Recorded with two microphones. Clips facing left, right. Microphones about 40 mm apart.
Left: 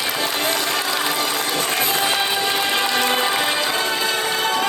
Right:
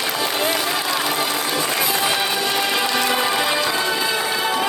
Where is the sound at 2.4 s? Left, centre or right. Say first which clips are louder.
Even; left.